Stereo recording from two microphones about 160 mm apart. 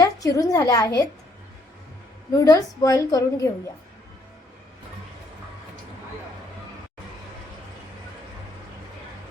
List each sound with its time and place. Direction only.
0.0 s a woman's voice: 20° left (ahead or behind)
2.4 s a woman's voice: 20° left (ahead or behind)